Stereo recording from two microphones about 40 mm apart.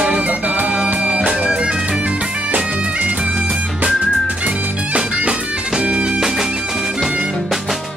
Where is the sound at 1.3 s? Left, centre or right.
Right.